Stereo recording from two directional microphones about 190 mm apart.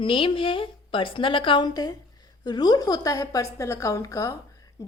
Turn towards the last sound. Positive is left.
turn(degrees=15)  # may be behind; listen again after turning